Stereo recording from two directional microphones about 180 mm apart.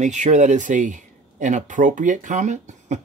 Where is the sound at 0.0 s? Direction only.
40° right (ahead or behind).